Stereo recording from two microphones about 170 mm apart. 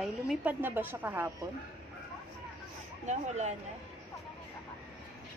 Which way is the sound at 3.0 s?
40° right (ahead or behind).